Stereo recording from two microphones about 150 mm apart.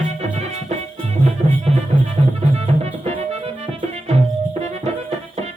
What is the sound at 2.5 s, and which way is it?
Music, 45° right (ahead or behind).